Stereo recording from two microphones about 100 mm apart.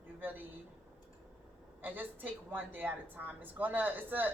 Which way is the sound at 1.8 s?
20° right (ahead or behind).